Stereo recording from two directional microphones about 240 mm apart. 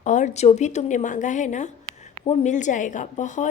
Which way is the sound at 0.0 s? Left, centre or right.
Left.